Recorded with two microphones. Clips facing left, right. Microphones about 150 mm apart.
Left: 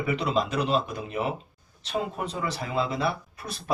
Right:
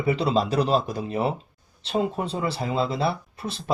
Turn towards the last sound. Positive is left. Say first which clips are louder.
# right 4 dB
turn(degrees=-25)  # may be behind; listen again after turning